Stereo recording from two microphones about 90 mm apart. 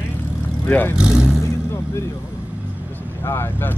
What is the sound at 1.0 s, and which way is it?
Speech, 10° right (ahead or behind).